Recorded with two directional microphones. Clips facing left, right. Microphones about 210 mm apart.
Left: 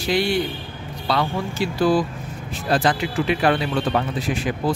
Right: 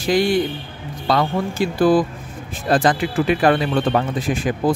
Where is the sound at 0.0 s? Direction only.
50° right (ahead or behind).